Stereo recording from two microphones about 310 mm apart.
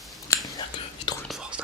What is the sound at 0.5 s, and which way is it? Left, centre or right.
Whispering, centre.